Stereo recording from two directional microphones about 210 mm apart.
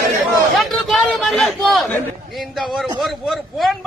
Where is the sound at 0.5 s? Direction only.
Centre (ahead or behind).